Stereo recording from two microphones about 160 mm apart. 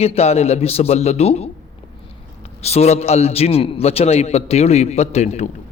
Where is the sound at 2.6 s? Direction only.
40° left (ahead or behind).